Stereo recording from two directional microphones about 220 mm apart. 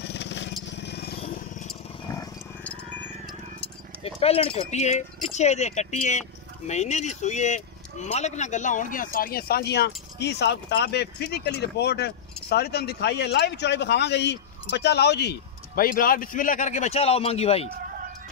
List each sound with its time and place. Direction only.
0.0 s crushing: 50° left (ahead or behind)
0.7 s vehicle: 50° left (ahead or behind)
2.1 s wild animals: 5° left (ahead or behind)
4.0 s speech: 25° left (ahead or behind)